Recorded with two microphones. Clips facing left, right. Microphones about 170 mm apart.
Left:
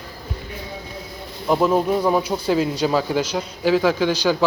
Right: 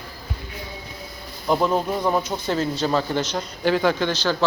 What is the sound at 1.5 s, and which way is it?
Speech, 5° left (ahead or behind).